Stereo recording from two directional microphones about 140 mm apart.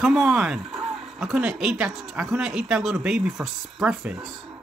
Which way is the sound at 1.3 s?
5° right (ahead or behind).